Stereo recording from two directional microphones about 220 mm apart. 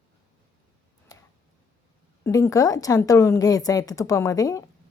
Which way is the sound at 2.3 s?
15° left (ahead or behind).